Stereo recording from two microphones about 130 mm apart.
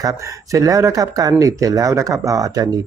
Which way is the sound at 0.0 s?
25° right (ahead or behind).